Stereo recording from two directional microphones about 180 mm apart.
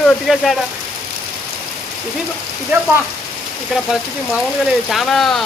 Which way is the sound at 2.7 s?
10° right (ahead or behind).